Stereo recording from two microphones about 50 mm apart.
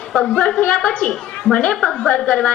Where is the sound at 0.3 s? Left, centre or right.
Left.